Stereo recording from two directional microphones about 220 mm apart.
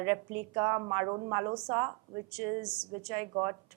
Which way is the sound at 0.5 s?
15° right (ahead or behind).